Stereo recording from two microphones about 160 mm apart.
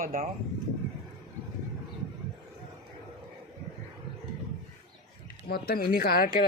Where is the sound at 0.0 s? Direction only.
60° right (ahead or behind).